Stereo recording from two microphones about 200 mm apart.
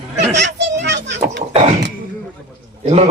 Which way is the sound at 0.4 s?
60° right (ahead or behind).